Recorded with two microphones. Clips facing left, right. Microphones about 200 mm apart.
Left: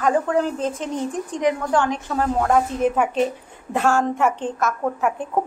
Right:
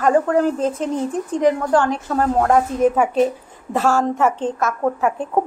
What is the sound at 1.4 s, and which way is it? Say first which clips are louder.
Speech: right 4 dB; 35° right (ahead or behind).